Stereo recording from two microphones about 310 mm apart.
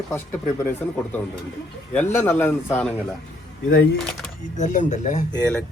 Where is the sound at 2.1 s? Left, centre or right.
Centre.